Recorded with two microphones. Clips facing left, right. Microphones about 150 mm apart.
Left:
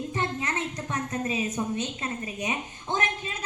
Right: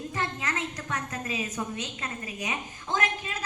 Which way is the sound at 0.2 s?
25° left (ahead or behind).